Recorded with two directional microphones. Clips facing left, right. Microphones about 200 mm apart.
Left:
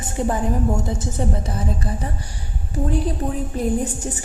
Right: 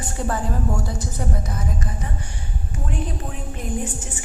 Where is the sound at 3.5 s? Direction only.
40° left (ahead or behind).